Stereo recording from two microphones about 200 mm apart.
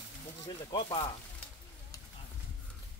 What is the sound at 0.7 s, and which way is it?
Speech, 25° left (ahead or behind).